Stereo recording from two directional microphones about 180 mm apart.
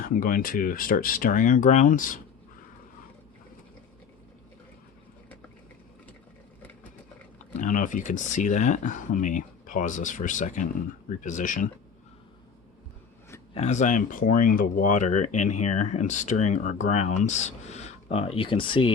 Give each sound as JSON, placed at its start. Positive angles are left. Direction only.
{"t": 0.0, "sound": "speech", "side_deg": 50}
{"t": 7.6, "sound": "speech", "side_deg": 45}
{"t": 13.5, "sound": "speech", "side_deg": 40}